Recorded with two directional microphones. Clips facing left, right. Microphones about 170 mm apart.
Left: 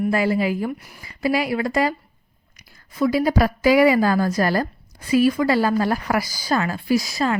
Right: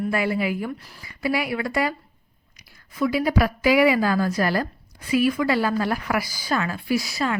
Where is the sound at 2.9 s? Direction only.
40° left (ahead or behind).